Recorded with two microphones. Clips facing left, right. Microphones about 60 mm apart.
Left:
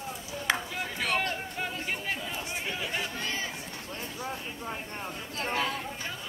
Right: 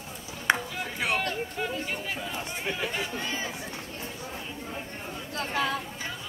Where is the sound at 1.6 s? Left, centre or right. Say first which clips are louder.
Left 1 dB; centre.